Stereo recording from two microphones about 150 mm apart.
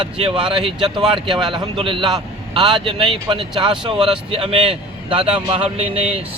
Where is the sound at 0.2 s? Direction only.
35° right (ahead or behind).